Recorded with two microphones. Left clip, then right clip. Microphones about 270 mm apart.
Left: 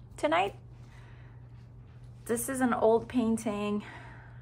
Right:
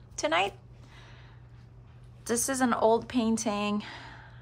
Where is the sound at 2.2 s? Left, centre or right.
Centre.